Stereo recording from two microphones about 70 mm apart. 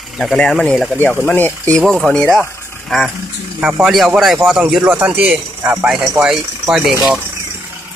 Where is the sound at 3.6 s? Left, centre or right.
Centre.